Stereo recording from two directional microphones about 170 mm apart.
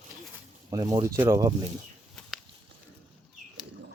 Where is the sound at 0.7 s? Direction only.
20° right (ahead or behind).